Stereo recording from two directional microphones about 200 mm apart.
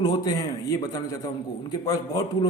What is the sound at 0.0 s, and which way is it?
A man's voice, 20° left (ahead or behind).